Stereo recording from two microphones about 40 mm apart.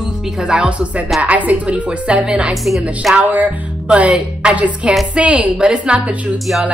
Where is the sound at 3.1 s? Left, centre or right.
Right.